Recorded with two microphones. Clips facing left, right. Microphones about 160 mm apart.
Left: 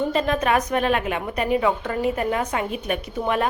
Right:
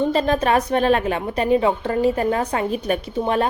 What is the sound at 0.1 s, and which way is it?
A woman's voice, 35° right (ahead or behind).